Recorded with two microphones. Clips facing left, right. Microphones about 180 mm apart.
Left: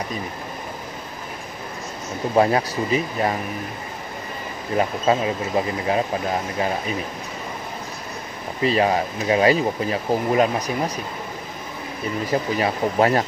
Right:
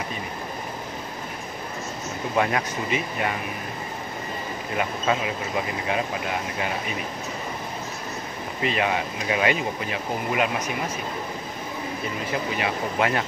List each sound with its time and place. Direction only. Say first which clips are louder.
2.3 s speech: left 6 dB; 35° left (ahead or behind)
4.7 s speech: left 6 dB; 35° left (ahead or behind)
8.6 s speech: left 6 dB; 35° left (ahead or behind)
12.3 s speech: left 5 dB; 40° left (ahead or behind)